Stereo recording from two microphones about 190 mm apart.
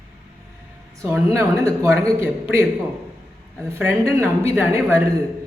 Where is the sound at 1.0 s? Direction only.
10° right (ahead or behind).